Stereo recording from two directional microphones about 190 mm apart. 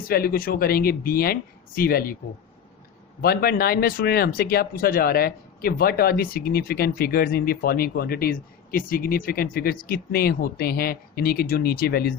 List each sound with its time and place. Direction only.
0.1 s speech: 50° left (ahead or behind)
3.2 s speech: 55° left (ahead or behind)